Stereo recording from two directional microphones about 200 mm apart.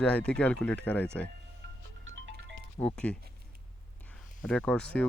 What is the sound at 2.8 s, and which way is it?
Speech, 20° left (ahead or behind).